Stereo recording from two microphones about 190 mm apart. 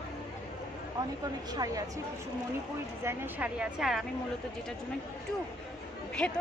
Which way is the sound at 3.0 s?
10° right (ahead or behind).